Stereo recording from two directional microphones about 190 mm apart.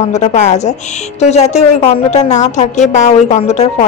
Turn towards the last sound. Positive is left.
turn(degrees=35)  # may be behind; listen again after turning